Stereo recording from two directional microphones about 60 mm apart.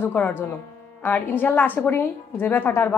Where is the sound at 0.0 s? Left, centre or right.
Left.